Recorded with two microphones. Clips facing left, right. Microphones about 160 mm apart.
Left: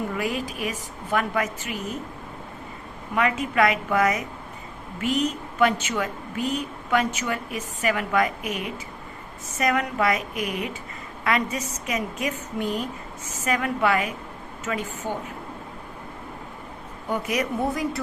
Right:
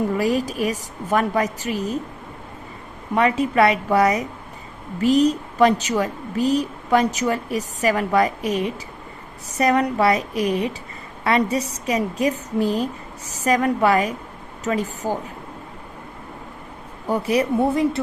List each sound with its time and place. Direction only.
0.2 s speech: 40° right (ahead or behind)
3.2 s speech: 35° right (ahead or behind)
17.1 s speech: 30° right (ahead or behind)